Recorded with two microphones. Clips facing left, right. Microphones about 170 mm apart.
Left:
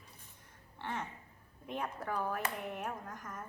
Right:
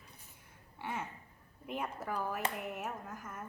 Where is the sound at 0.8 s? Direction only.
10° right (ahead or behind).